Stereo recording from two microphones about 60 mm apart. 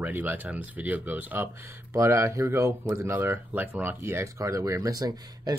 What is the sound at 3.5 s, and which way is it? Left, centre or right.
Speech, right.